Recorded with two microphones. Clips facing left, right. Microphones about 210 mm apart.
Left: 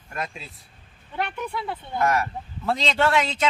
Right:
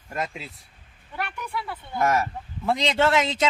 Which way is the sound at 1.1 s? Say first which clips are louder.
Left 3 dB; 25° left (ahead or behind).